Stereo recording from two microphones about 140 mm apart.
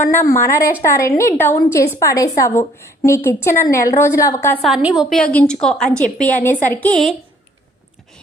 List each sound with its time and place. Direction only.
0.0 s a woman's voice: 15° left (ahead or behind)
4.6 s a woman's voice: 5° right (ahead or behind)